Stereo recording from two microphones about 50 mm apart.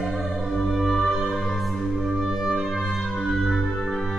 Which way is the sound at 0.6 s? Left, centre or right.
Centre.